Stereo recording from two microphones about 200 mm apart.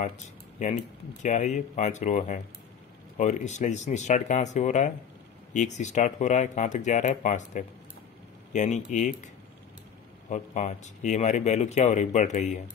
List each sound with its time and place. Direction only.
0.6 s speech: 40° left (ahead or behind)
10.3 s speech: 35° left (ahead or behind)